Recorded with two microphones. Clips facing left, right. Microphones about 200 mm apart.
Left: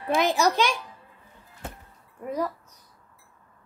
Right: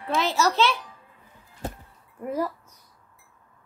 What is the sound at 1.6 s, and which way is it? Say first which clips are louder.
Music: right 5 dB; 35° right (ahead or behind).